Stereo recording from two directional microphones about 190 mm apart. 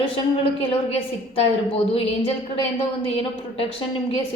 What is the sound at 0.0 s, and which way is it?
A woman's voice, 30° left (ahead or behind).